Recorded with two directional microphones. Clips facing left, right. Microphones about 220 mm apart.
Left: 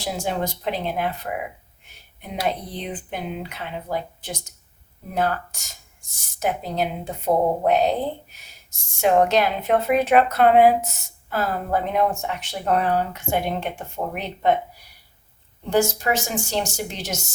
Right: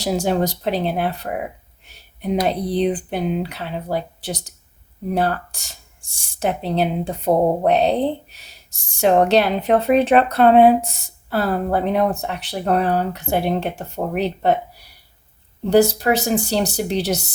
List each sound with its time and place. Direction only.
0.0 s speech: 40° right (ahead or behind)
15.7 s speech: 35° right (ahead or behind)